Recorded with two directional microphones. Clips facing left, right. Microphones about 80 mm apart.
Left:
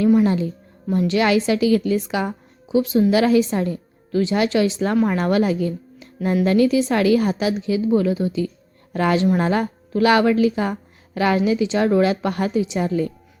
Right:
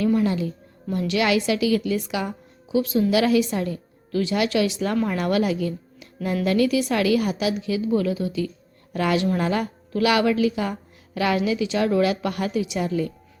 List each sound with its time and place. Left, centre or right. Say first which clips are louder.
0.0 s a woman's voice: left 5 dB; left